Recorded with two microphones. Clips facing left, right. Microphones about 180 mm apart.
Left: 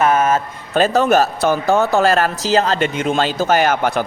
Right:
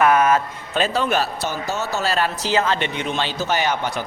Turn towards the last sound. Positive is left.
turn(degrees=50)  # may be behind; listen again after turning